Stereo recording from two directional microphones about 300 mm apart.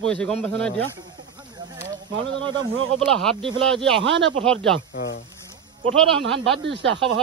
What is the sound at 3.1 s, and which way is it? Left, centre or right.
Speech, centre.